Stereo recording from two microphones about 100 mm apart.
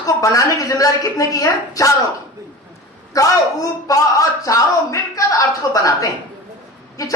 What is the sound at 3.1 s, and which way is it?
A man's voice, 35° left (ahead or behind).